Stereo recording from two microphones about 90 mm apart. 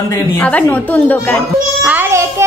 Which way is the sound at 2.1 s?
30° right (ahead or behind).